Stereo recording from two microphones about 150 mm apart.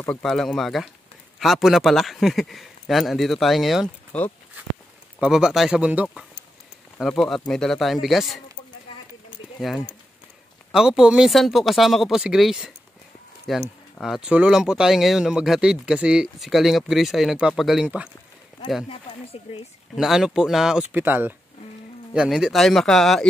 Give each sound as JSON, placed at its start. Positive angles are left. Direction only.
{"t": 0.2, "sound": "speech", "side_deg": 0}
{"t": 9.6, "sound": "speech", "side_deg": 0}
{"t": 18.9, "sound": "speech", "side_deg": 35}
{"t": 20.0, "sound": "speech", "side_deg": 0}
{"t": 20.9, "sound": "speech", "side_deg": -15}